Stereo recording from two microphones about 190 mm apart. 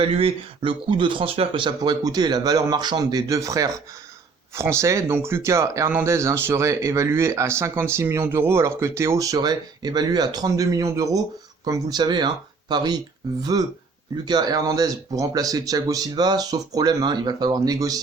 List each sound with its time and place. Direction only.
0.0 s speech: 30° right (ahead or behind)